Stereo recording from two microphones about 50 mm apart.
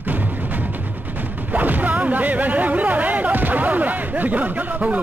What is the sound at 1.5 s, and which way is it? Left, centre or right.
Speech, right.